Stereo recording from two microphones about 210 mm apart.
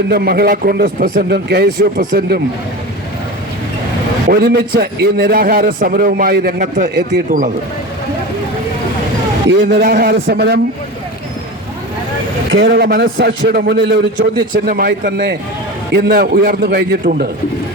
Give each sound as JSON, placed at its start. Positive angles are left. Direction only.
{"t": 0.1, "sound": "a man's voice", "side_deg": -50}
{"t": 4.3, "sound": "a man's voice", "side_deg": -50}
{"t": 9.5, "sound": "a man's voice", "side_deg": -55}
{"t": 9.8, "sound": "a man's voice", "side_deg": -45}
{"t": 12.5, "sound": "a man's voice", "side_deg": -50}